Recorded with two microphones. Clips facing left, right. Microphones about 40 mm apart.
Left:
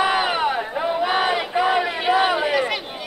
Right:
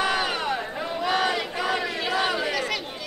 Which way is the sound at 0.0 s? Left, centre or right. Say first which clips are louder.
Left 5 dB; left.